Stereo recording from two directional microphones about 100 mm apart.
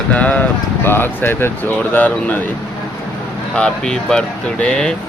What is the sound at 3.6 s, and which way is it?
Speech, 10° left (ahead or behind).